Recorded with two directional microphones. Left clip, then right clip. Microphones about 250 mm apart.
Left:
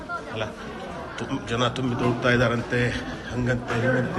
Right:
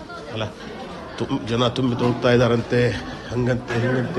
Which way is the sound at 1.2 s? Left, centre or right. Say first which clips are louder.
Right 4 dB; centre.